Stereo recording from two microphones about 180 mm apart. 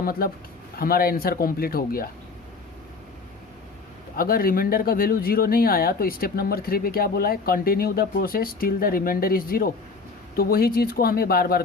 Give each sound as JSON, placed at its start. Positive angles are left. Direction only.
{"t": 0.0, "sound": "speech", "side_deg": 55}
{"t": 4.2, "sound": "speech", "side_deg": 55}